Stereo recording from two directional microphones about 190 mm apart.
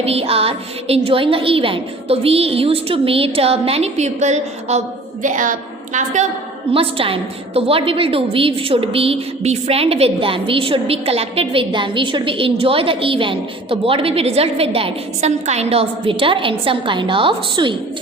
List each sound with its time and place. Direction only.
0.0 s a woman's voice: 30° right (ahead or behind)
6.7 s a woman's voice: 30° right (ahead or behind)